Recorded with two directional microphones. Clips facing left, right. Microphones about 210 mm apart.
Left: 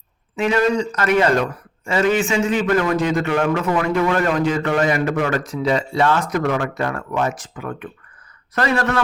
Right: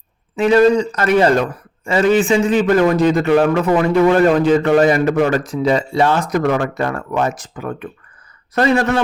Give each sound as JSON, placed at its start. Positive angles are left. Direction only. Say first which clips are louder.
{"t": 0.3, "sound": "a man's voice", "louder": "right 6 dB", "side_deg": -35}
{"t": 8.5, "sound": "a man's voice", "louder": "right 5 dB", "side_deg": -25}